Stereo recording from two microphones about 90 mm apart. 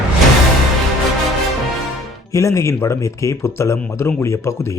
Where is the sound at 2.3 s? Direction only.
35° left (ahead or behind).